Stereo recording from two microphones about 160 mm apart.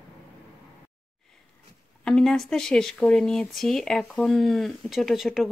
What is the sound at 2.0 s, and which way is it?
Speech, 5° left (ahead or behind).